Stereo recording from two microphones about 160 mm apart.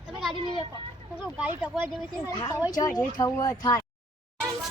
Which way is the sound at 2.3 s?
25° left (ahead or behind).